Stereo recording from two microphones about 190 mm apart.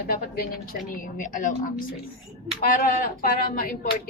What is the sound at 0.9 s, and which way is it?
Speech, 45° left (ahead or behind).